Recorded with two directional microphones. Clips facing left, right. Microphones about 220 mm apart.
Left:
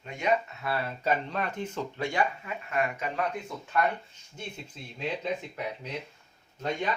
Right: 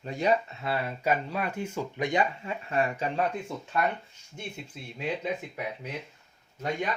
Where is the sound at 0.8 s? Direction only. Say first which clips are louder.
Right 1 dB; 10° right (ahead or behind); by 3.2 s 30° right (ahead or behind).